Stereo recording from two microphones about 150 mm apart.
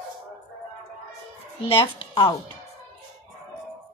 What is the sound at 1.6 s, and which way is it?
Speech, 30° left (ahead or behind).